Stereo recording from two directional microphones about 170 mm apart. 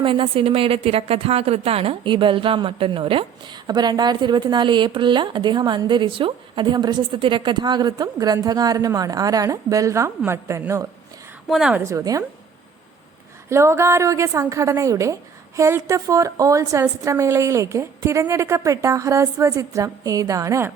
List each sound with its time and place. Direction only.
0.0 s a woman's voice: 30° right (ahead or behind)
11.4 s a woman's voice: 5° right (ahead or behind)
11.8 s a woman's voice: 20° right (ahead or behind)
13.5 s a woman's voice: 15° right (ahead or behind)